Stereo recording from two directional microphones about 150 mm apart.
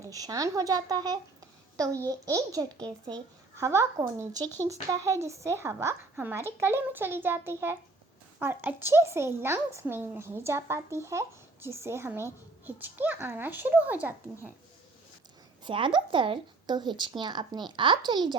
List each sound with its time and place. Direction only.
0.1 s speech: 25° right (ahead or behind)
2.7 s speech: 5° left (ahead or behind)
3.5 s speech: 20° right (ahead or behind)
15.6 s speech: 35° right (ahead or behind)